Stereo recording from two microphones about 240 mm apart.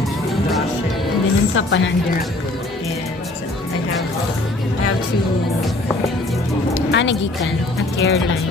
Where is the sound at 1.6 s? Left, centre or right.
Left.